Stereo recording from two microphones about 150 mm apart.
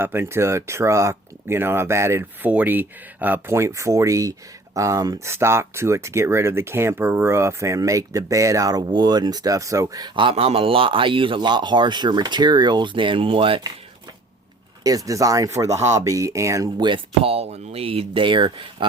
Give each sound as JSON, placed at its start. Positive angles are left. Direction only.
{"t": 0.0, "sound": "speech", "side_deg": -15}
{"t": 14.8, "sound": "speech", "side_deg": -25}